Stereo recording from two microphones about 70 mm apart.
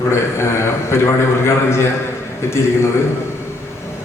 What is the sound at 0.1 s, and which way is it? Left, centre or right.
A man's voice, left.